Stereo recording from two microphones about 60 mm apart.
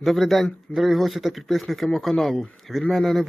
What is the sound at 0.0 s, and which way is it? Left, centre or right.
Speech, centre.